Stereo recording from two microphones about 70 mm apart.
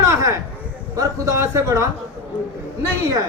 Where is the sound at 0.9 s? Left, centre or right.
Right.